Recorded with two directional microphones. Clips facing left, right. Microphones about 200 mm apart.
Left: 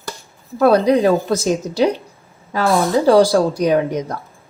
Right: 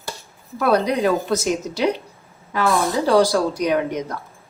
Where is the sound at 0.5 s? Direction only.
30° left (ahead or behind).